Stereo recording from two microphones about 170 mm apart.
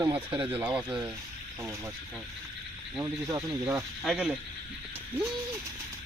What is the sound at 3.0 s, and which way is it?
Speech, 15° right (ahead or behind).